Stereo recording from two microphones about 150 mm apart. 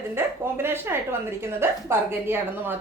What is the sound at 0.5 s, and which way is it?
A woman's voice, 15° right (ahead or behind).